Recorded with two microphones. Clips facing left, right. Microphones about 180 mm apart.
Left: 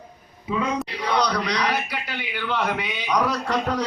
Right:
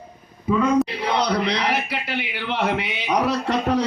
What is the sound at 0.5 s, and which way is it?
Speech, 50° right (ahead or behind).